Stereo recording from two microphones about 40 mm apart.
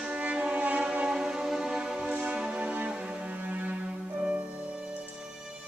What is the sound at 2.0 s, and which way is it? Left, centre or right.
Music, right.